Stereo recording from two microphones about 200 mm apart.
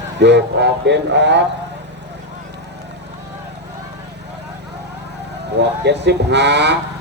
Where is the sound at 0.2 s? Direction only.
60° right (ahead or behind).